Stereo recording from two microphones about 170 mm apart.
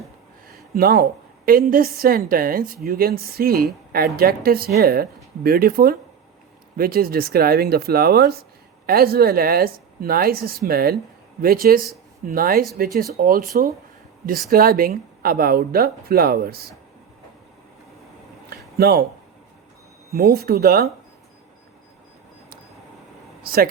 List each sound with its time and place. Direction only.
0.4 s a sound: 60° right (ahead or behind)
1.5 s a woman's voice: 60° right (ahead or behind)
18.8 s speech: 70° right (ahead or behind)
20.1 s a woman's voice: 65° right (ahead or behind)
23.4 s speech: 60° right (ahead or behind)